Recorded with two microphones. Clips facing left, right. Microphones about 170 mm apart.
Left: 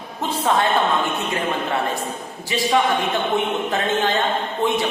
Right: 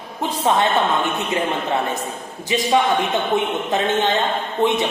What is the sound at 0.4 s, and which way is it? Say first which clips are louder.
Speech: right 1 dB; 20° right (ahead or behind).